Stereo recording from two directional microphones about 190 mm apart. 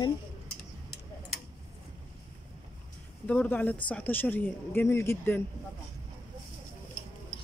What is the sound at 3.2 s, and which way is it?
Speech, 5° left (ahead or behind).